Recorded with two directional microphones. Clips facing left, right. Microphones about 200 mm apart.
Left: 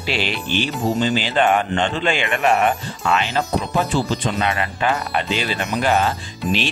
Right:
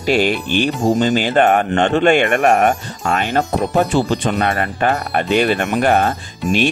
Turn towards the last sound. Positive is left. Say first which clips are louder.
# right 5 dB
turn(degrees=-55)  # may be behind; listen again after turning